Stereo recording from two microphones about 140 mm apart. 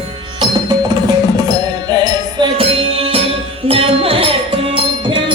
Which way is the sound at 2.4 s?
40° right (ahead or behind).